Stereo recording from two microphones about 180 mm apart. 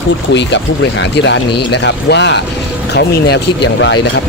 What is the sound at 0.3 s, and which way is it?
Speech, 75° left (ahead or behind).